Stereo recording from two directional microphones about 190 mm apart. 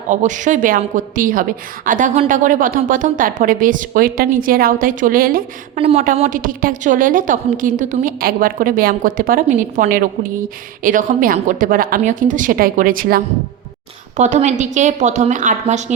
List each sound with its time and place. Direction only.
0.1 s a woman's voice: 40° right (ahead or behind)
5.7 s a woman's voice: 35° right (ahead or behind); by 13.2 s 50° right (ahead or behind)
14.2 s a woman's voice: 35° right (ahead or behind)